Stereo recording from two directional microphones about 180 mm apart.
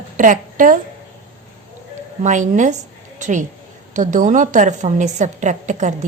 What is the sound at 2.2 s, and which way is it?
A woman's voice, 45° right (ahead or behind).